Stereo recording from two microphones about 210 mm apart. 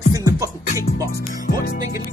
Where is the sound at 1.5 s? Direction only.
45° left (ahead or behind).